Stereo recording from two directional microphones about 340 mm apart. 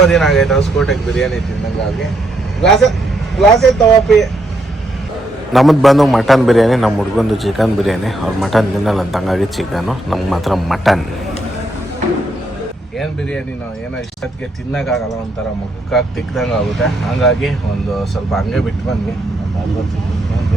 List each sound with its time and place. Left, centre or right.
0.1 s a man's voice: centre
3.3 s a man's voice: centre
5.5 s a man's voice: centre
14.7 s a man's voice: centre